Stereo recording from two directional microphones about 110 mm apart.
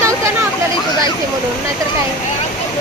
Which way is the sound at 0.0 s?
30° right (ahead or behind).